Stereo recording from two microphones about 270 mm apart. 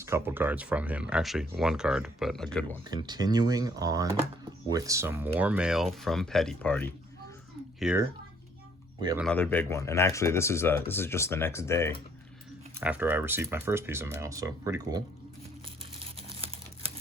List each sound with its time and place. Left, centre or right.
0.0 s speech: centre
2.8 s speech: centre
9.0 s speech: centre
9.2 s speech: centre
12.8 s speech: centre
16.1 s crumpling: right